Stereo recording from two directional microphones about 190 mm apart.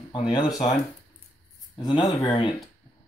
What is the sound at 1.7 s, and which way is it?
Speech, 25° left (ahead or behind).